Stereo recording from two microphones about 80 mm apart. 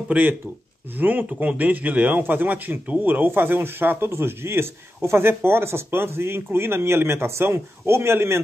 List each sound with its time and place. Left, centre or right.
0.1 s speech: right